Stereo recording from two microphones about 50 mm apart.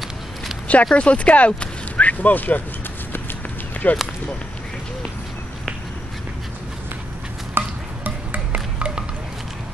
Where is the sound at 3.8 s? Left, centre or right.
Left.